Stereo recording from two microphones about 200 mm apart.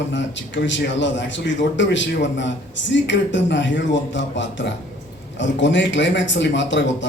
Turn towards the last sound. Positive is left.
turn(degrees=65)  # may be behind; listen again after turning